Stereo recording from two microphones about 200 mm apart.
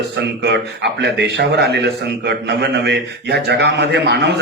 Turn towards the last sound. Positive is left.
turn(degrees=-55)  # may be behind; listen again after turning